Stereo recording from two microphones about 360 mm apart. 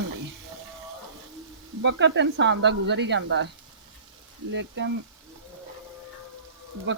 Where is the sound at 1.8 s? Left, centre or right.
Right.